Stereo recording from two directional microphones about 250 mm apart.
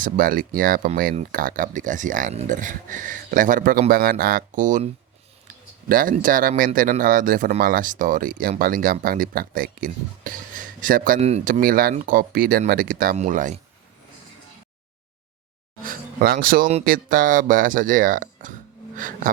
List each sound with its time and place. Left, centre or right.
0.0 s speech: right
5.9 s speech: right
15.8 s speech: right